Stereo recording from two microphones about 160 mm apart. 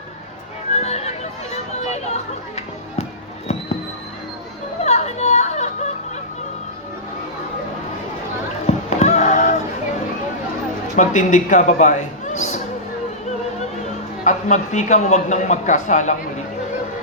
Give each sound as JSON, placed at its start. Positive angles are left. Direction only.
{"t": 0.7, "sound": "neigh", "side_deg": 45}
{"t": 4.8, "sound": "chatter", "side_deg": 45}
{"t": 8.6, "sound": "a sound", "side_deg": 45}
{"t": 10.9, "sound": "a man's voice", "side_deg": 50}
{"t": 14.3, "sound": "speech", "side_deg": 50}